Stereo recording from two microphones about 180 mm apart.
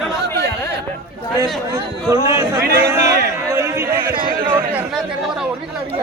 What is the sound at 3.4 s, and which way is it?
Chatter, 15° right (ahead or behind).